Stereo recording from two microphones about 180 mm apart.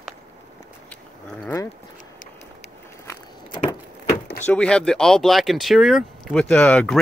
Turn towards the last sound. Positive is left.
turn(degrees=5)  # may be behind; listen again after turning